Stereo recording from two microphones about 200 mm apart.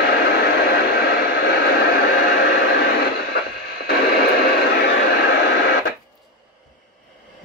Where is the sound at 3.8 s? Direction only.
50° left (ahead or behind).